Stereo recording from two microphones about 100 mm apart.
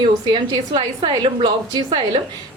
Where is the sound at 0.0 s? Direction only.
50° right (ahead or behind).